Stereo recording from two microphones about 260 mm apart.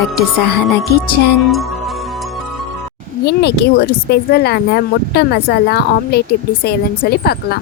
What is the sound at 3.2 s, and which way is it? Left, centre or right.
Speech, left.